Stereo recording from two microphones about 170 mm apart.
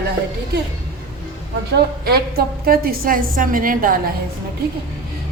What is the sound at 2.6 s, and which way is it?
A woman's voice, 60° right (ahead or behind).